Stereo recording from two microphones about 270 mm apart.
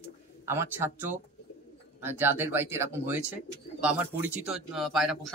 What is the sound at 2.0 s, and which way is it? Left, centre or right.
A man's voice, centre.